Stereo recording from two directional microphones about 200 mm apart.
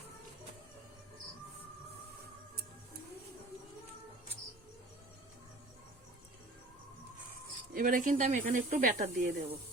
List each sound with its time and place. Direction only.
7.7 s speech: 45° right (ahead or behind)